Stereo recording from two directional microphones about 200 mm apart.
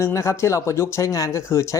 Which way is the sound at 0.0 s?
15° left (ahead or behind).